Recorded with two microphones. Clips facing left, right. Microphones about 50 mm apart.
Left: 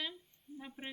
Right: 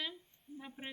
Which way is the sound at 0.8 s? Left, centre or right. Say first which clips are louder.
Left 1 dB; right.